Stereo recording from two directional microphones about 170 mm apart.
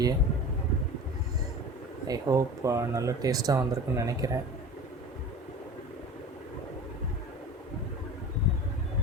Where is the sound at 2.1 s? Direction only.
20° right (ahead or behind).